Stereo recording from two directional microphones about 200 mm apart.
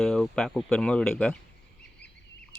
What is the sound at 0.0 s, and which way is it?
Speech, 5° left (ahead or behind).